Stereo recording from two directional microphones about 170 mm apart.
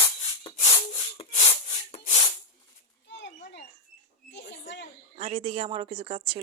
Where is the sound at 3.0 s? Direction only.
90° left.